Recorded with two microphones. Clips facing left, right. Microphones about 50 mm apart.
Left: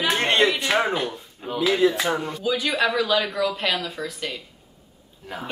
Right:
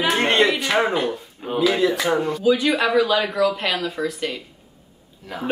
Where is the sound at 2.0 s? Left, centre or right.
Centre.